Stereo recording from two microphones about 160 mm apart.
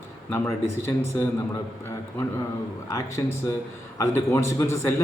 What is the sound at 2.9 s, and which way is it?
A man's voice, 20° left (ahead or behind).